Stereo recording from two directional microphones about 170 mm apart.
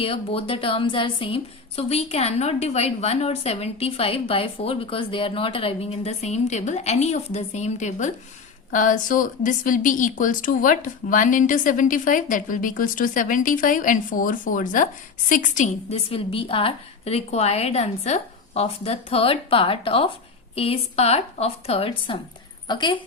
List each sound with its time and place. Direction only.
0.0 s a woman's voice: 35° left (ahead or behind)